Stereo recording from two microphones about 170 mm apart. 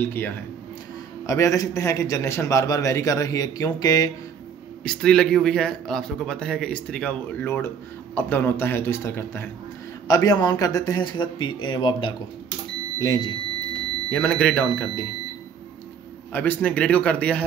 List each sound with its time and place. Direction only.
0.0 s a man's voice: 15° left (ahead or behind)
4.8 s a man's voice: 5° left (ahead or behind)
14.0 s a man's voice: 10° left (ahead or behind)
16.3 s a man's voice: 10° left (ahead or behind)